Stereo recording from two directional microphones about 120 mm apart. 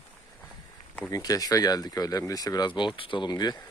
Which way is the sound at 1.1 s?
30° left (ahead or behind).